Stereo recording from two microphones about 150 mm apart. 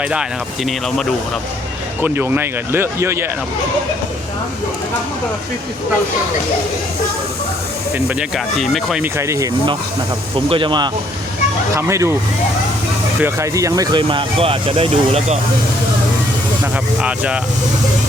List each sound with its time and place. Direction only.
0.0 s speech: 5° right (ahead or behind)
2.0 s speech: 15° right (ahead or behind)
8.5 s speech: centre (ahead or behind)
9.1 s speech: 20° right (ahead or behind)
10.3 s speech: 35° right (ahead or behind)
11.7 s speech: 20° right (ahead or behind)
13.1 s speech: 15° right (ahead or behind); by 15.4 s 40° right (ahead or behind)
17.0 s speech: 5° right (ahead or behind)